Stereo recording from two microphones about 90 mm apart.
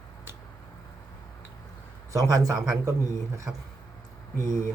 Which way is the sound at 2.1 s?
40° right (ahead or behind).